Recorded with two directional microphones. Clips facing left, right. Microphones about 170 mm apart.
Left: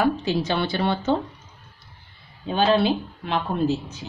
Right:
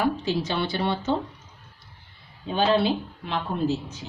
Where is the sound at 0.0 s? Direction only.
70° left (ahead or behind).